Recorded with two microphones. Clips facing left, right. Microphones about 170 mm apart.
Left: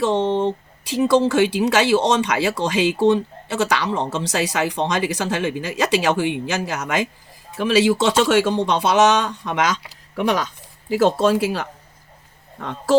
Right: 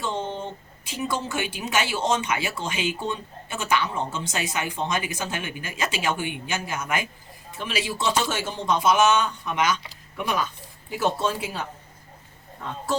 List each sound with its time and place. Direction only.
0.0 s speech: 90° left